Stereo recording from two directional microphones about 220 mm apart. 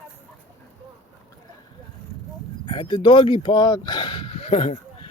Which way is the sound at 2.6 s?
20° left (ahead or behind).